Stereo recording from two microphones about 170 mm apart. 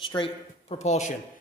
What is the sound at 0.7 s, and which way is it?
Speech, 40° left (ahead or behind).